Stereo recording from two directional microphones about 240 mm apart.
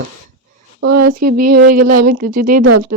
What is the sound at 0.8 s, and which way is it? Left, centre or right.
Speech, right.